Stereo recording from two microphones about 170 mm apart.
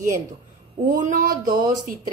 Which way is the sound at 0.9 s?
50° right (ahead or behind).